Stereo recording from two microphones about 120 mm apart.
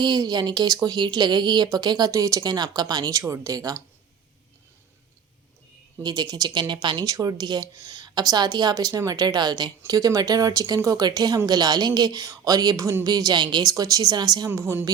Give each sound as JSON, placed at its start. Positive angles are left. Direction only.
{"t": 0.0, "sound": "speech", "side_deg": -35}
{"t": 6.0, "sound": "speech", "side_deg": -35}